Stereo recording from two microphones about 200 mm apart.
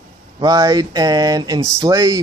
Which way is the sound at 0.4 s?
20° right (ahead or behind).